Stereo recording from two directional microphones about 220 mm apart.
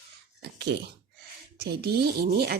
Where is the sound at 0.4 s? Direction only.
50° right (ahead or behind).